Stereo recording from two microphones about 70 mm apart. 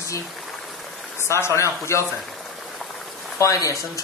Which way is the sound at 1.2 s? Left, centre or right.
Left.